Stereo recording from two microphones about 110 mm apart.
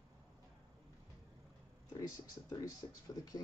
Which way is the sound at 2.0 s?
30° left (ahead or behind).